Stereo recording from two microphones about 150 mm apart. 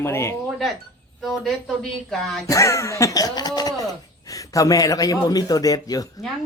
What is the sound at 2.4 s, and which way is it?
A man's voice, 20° left (ahead or behind).